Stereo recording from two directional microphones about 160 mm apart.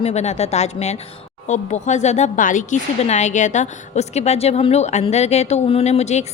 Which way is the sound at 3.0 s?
45° left (ahead or behind).